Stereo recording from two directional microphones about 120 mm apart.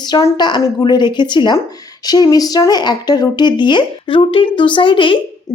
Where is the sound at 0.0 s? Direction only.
35° left (ahead or behind).